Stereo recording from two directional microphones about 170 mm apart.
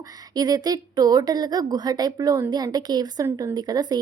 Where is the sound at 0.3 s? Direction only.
25° right (ahead or behind).